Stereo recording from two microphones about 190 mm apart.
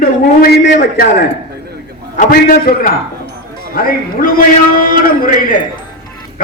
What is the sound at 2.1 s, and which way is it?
A man's voice, 50° left (ahead or behind).